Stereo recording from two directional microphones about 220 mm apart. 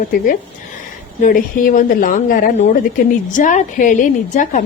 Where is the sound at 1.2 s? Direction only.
40° left (ahead or behind).